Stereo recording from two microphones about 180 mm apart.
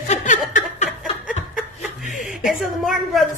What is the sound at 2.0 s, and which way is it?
Chuckle, 45° left (ahead or behind).